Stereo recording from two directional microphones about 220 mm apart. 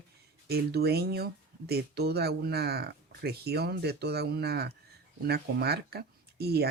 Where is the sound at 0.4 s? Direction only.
45° right (ahead or behind).